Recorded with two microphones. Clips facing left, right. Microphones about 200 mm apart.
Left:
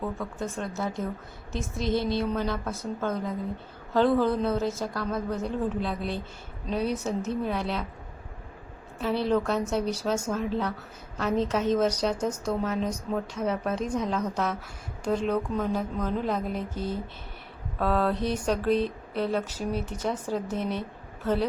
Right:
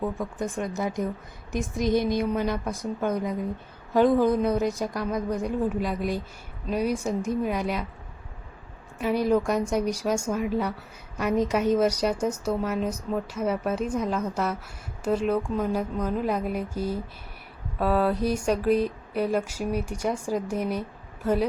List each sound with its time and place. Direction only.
0.0 s a woman's voice: 15° right (ahead or behind)
9.0 s a woman's voice: 10° right (ahead or behind)